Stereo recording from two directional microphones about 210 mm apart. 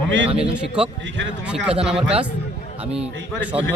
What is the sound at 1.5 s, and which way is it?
Speech, 5° right (ahead or behind).